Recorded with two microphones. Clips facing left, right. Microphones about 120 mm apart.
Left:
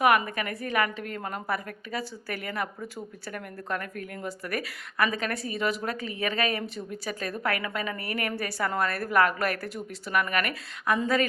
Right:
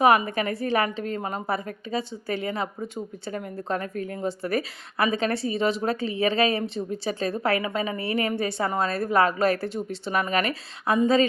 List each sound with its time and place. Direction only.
0.3 s a woman's voice: 30° right (ahead or behind)